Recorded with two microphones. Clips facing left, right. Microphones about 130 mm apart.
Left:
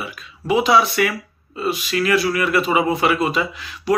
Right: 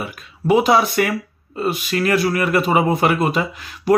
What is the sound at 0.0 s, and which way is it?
Speech, 50° right (ahead or behind).